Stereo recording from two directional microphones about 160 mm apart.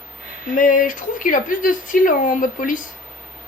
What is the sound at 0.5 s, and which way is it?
Speech, 55° left (ahead or behind).